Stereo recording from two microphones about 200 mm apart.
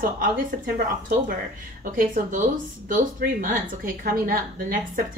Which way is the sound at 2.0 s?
40° right (ahead or behind).